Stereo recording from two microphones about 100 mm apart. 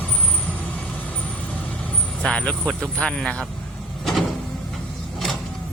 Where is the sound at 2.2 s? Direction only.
10° left (ahead or behind).